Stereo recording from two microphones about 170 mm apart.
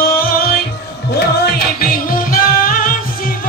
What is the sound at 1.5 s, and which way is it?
Music, 60° left (ahead or behind).